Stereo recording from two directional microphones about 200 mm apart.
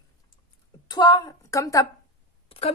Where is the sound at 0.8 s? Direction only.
20° left (ahead or behind).